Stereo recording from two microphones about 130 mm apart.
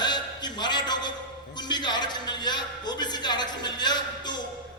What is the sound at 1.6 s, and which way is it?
A man's voice, 35° left (ahead or behind).